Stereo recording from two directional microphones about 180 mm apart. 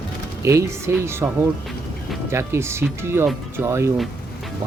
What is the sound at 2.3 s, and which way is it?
Speech, 15° right (ahead or behind).